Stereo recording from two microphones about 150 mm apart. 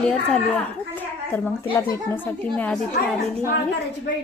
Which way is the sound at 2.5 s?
5° left (ahead or behind).